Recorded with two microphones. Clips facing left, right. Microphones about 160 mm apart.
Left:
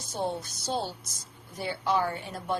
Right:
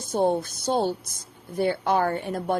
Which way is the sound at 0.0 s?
50° right (ahead or behind).